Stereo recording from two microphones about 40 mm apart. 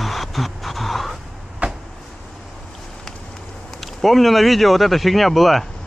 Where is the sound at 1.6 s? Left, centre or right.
Right.